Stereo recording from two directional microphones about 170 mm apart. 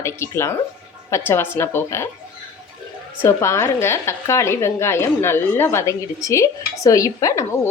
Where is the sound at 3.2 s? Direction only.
15° left (ahead or behind).